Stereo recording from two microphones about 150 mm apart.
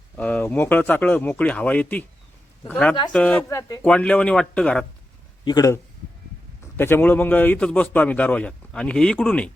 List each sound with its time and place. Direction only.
0.2 s a man's voice: 10° left (ahead or behind)
5.5 s speech: 30° left (ahead or behind)
6.7 s a man's voice: 15° left (ahead or behind)